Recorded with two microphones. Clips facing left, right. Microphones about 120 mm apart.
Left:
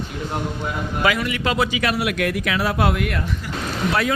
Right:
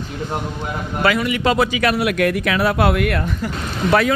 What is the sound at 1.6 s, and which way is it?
Speech, 55° right (ahead or behind).